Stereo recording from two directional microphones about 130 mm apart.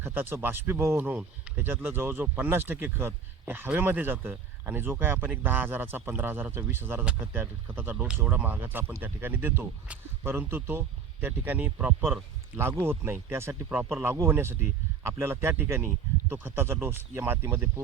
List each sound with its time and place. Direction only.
0.0 s speech: 15° right (ahead or behind)